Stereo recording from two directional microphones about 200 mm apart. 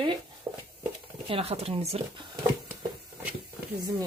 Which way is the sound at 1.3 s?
30° right (ahead or behind).